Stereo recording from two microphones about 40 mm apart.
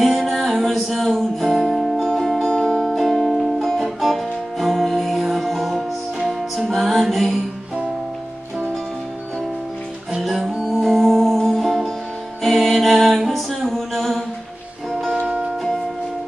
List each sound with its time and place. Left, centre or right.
0.0 s music: centre
2.0 s music: centre
3.0 s music: centre
10.2 s music: centre
15.1 s music: right